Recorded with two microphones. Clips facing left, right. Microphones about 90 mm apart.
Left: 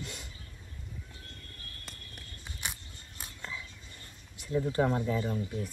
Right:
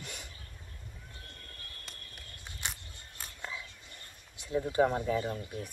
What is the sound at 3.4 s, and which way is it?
Whispering, 15° right (ahead or behind).